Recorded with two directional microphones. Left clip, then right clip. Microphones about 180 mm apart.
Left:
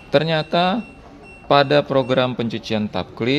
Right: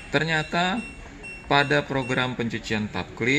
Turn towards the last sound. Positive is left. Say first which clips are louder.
# left 3 dB
turn(degrees=55)  # may be behind; listen again after turning